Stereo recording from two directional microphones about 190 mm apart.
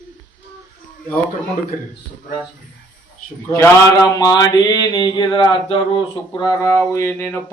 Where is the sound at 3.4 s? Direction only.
15° left (ahead or behind).